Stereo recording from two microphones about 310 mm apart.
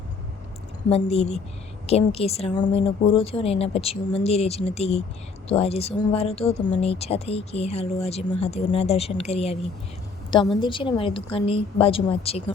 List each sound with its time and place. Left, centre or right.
0.9 s speech: centre
10.6 s a woman's voice: centre